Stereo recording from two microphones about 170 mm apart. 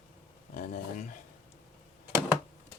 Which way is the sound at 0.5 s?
50° left (ahead or behind).